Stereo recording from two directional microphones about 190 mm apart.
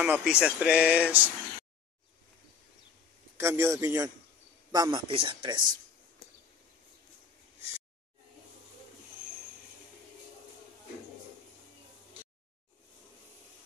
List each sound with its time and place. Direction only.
0.0 s speech: 5° right (ahead or behind)
3.3 s speech: 15° right (ahead or behind)